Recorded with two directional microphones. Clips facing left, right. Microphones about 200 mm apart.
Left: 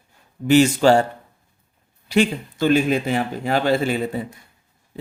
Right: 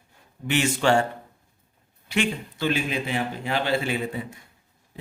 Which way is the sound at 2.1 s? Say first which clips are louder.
Left 7 dB; 40° left (ahead or behind).